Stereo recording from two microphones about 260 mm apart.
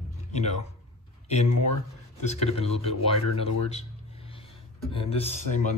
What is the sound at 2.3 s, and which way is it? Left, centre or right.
Speech, left.